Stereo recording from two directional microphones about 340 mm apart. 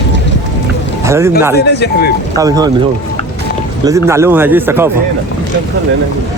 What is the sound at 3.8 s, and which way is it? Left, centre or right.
Speech, centre.